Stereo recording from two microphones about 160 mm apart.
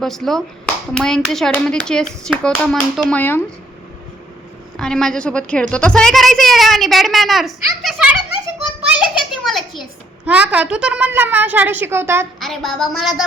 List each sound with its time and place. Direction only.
0.0 s a woman's voice: centre (ahead or behind)
4.8 s a woman's voice: 5° left (ahead or behind)
9.0 s a sound: centre (ahead or behind)
10.2 s a woman's voice: 10° right (ahead or behind)
12.4 s a woman's voice: centre (ahead or behind)